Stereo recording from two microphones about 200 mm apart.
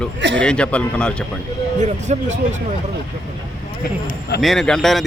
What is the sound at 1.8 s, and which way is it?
Speech, 35° right (ahead or behind).